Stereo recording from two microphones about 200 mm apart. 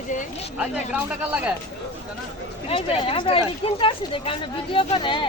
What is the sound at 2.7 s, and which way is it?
Speech, 25° left (ahead or behind).